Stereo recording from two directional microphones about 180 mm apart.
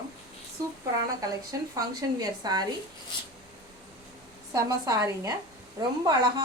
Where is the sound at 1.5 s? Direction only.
20° right (ahead or behind).